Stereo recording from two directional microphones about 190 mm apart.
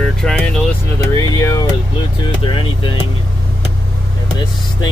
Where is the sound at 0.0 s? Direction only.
5° left (ahead or behind).